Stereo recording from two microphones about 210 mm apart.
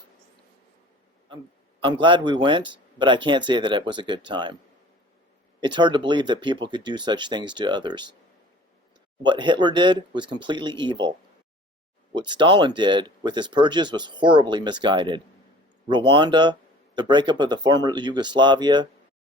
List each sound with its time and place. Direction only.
1.8 s speech: 20° right (ahead or behind)
5.5 s speech: 20° right (ahead or behind)
9.2 s speech: 20° right (ahead or behind)
12.1 s speech: 20° right (ahead or behind)